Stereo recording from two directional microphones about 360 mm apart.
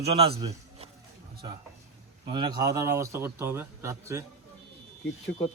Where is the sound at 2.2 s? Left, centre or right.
Centre.